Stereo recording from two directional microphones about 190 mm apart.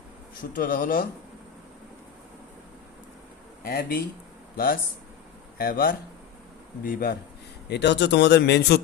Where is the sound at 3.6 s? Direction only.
50° left (ahead or behind).